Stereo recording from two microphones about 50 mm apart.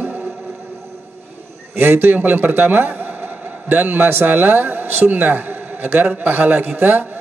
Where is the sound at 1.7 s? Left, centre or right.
Right.